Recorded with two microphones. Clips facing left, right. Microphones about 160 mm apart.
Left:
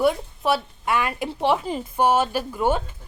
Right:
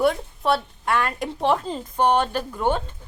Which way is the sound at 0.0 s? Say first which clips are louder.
Even; 5° left (ahead or behind).